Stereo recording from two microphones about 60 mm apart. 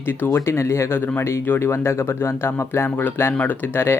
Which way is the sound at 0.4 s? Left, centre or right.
Left.